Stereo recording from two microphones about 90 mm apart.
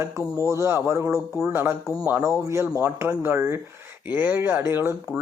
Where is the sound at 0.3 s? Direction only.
35° right (ahead or behind).